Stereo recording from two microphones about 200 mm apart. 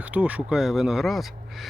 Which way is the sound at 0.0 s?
5° right (ahead or behind).